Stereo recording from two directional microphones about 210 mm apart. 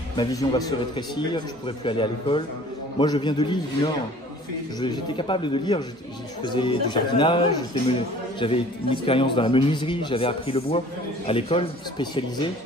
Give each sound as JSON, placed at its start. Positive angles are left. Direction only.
{"t": 0.2, "sound": "a man's voice", "side_deg": 20}